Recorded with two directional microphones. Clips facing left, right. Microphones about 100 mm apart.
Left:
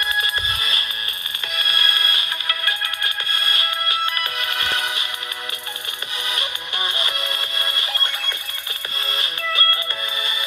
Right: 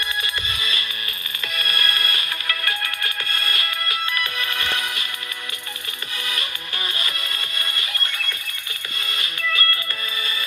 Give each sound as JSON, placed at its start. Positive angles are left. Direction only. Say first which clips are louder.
{"t": 0.1, "sound": "music", "louder": "left 4 dB", "side_deg": 35}
{"t": 1.5, "sound": "music", "louder": "left 1 dB", "side_deg": 20}
{"t": 6.2, "sound": "music", "louder": "left 2 dB", "side_deg": 25}